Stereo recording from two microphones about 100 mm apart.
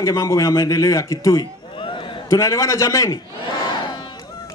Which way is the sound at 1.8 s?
55° left (ahead or behind).